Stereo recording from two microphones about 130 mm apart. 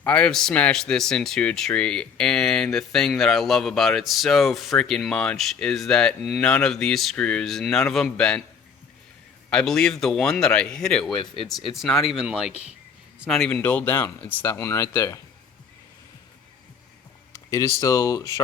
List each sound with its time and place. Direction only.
0.0 s speech: 10° left (ahead or behind)
9.5 s a man's voice: 5° left (ahead or behind)
13.5 s speech: 10° left (ahead or behind)
17.5 s speech: 25° left (ahead or behind)